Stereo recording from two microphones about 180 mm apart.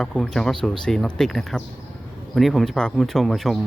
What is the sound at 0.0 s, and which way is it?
Speech, 5° left (ahead or behind).